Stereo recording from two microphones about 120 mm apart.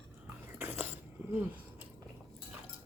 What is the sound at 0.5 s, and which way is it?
Biting, 15° right (ahead or behind).